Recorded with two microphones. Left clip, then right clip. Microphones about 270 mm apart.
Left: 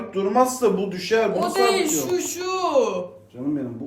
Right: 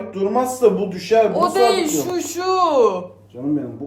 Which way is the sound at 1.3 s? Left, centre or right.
Centre.